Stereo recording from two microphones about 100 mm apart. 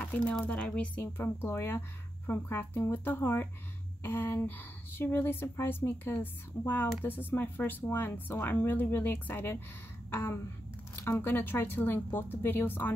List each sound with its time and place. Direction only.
0.0 s speech: 10° left (ahead or behind)
1.1 s speech: 25° left (ahead or behind)